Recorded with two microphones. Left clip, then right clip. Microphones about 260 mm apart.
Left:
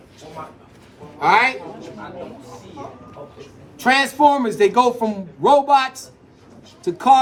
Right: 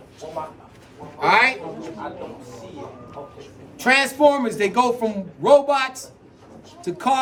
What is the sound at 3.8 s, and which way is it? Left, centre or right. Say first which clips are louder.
Speech: left 1 dB; centre.